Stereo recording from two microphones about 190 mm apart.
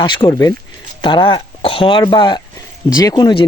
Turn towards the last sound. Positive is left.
turn(degrees=25)  # may be behind; listen again after turning